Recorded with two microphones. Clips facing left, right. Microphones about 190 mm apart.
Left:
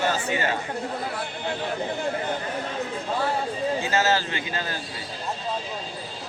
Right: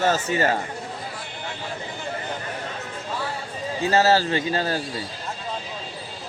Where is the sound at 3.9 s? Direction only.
35° right (ahead or behind).